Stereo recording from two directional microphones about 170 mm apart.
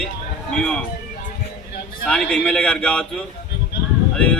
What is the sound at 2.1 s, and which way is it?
A man's voice, 5° left (ahead or behind).